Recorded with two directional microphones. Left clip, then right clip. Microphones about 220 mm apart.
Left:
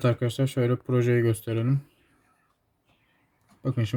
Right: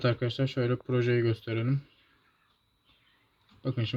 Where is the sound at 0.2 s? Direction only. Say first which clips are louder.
Left 3 dB; 25° left (ahead or behind).